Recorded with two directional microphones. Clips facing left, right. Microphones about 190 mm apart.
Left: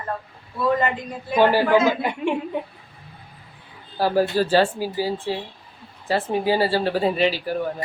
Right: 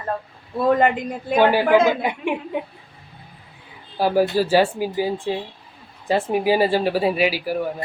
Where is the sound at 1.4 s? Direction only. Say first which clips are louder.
Right 1 dB; 15° right (ahead or behind).